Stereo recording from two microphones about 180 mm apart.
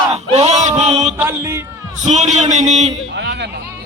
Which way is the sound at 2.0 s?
40° right (ahead or behind).